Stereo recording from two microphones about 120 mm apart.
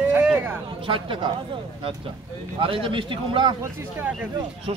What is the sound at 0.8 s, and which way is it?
Speech, 45° right (ahead or behind).